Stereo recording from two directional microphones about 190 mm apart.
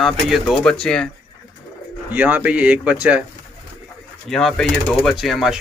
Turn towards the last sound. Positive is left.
turn(degrees=0)  # may be behind; listen again after turning